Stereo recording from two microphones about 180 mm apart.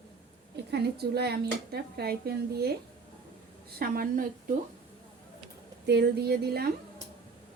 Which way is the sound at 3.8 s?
55° right (ahead or behind).